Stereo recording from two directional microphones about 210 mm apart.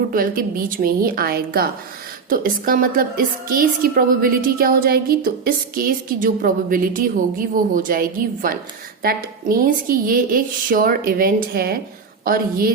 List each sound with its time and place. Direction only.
0.1 s a woman's voice: 45° right (ahead or behind)